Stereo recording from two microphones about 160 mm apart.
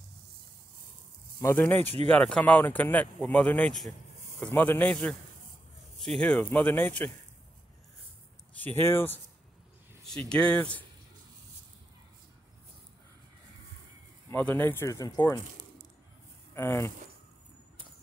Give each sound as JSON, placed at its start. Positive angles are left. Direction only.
{"t": 1.4, "sound": "speech", "side_deg": 15}
{"t": 8.5, "sound": "speech", "side_deg": 15}
{"t": 14.3, "sound": "speech", "side_deg": 10}
{"t": 16.5, "sound": "speech", "side_deg": 15}